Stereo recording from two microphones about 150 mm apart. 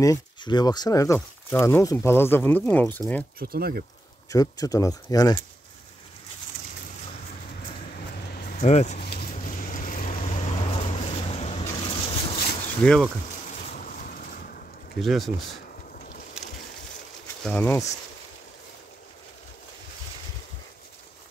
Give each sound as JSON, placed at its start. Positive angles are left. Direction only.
{"t": 0.0, "sound": "speech", "side_deg": 25}
{"t": 3.3, "sound": "speech", "side_deg": -90}
{"t": 4.3, "sound": "speech", "side_deg": 25}
{"t": 8.2, "sound": "vehicle", "side_deg": 90}
{"t": 8.6, "sound": "speech", "side_deg": 50}
{"t": 9.1, "sound": "vehicle", "side_deg": 65}
{"t": 12.8, "sound": "speech", "side_deg": 5}
{"t": 13.5, "sound": "boat", "side_deg": 60}
{"t": 15.0, "sound": "speech", "side_deg": 0}
{"t": 15.9, "sound": "boat", "side_deg": 65}
{"t": 17.4, "sound": "speech", "side_deg": 10}